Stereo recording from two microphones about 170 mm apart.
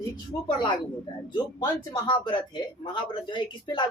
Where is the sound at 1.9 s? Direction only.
25° left (ahead or behind).